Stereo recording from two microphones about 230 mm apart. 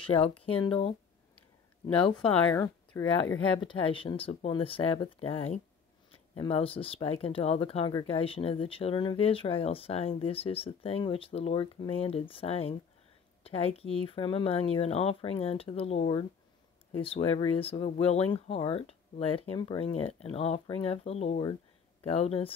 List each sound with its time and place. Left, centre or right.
0.1 s speech: centre
2.1 s speech: centre